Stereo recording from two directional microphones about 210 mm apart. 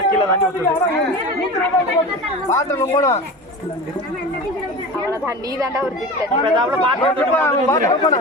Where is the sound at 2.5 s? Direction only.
15° left (ahead or behind).